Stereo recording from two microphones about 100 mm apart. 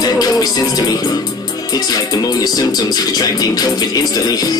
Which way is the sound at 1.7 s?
40° left (ahead or behind).